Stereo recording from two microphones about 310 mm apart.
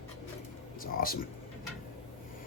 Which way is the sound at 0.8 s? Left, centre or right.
Left.